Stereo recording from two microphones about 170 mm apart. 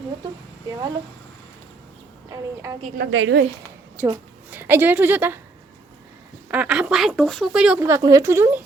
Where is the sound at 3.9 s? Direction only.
10° right (ahead or behind).